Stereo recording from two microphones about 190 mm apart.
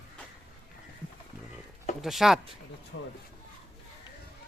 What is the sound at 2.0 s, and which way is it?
Speech, centre (ahead or behind).